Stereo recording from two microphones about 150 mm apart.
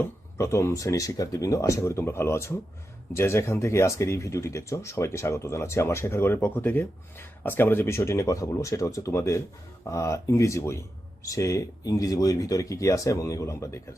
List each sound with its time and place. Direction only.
0.0 s speech: 20° left (ahead or behind)